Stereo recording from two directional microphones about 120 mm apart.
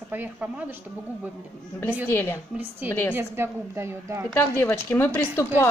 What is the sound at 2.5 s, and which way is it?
A woman's voice, 15° right (ahead or behind).